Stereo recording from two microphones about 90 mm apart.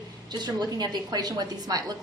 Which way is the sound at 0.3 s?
50° right (ahead or behind).